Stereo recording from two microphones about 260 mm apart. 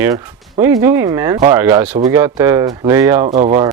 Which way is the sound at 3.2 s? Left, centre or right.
Right.